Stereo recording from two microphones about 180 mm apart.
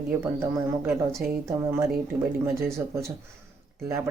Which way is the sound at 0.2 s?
15° right (ahead or behind).